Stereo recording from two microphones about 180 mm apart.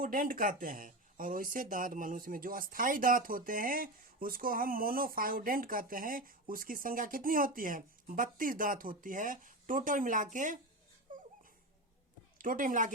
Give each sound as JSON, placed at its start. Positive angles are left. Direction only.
{"t": 0.0, "sound": "speech", "side_deg": -50}
{"t": 11.1, "sound": "a sound", "side_deg": -45}
{"t": 12.4, "sound": "speech", "side_deg": -50}